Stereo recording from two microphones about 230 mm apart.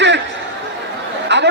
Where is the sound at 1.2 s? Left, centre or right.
Right.